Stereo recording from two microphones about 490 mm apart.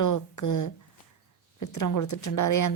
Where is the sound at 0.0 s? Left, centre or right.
Left.